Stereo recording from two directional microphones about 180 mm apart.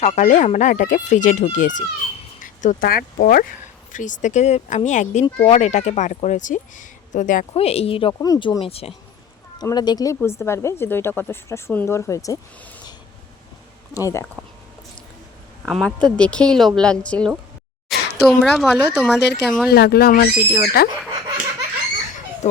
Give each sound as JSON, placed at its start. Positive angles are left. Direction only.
{"t": 0.0, "sound": "speech", "side_deg": 40}
{"t": 7.5, "sound": "a woman's voice", "side_deg": 35}
{"t": 13.9, "sound": "a woman's voice", "side_deg": 15}
{"t": 15.6, "sound": "a woman's voice", "side_deg": 5}
{"t": 17.8, "sound": "a sound", "side_deg": 0}
{"t": 18.9, "sound": "a woman's voice", "side_deg": 5}
{"t": 19.7, "sound": "speech", "side_deg": 60}